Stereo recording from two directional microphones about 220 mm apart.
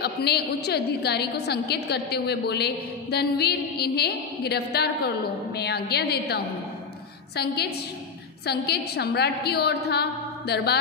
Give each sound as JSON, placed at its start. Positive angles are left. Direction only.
{"t": 0.0, "sound": "a woman's voice", "side_deg": 50}